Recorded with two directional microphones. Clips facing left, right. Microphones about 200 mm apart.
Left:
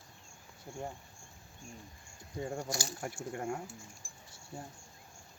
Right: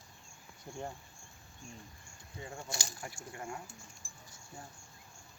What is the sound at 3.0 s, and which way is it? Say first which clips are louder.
Speech: left 6 dB; 50° left (ahead or behind).